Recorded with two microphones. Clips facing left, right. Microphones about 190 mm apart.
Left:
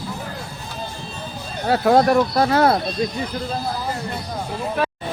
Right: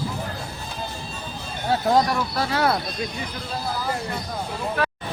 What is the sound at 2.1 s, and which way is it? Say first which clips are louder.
Speech: left 8 dB; 45° left (ahead or behind).